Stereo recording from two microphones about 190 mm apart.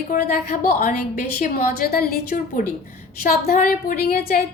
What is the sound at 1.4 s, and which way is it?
A woman's voice, 50° left (ahead or behind).